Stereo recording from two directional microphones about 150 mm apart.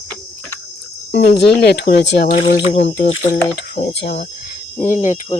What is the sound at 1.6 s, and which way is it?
Speech, 90° left.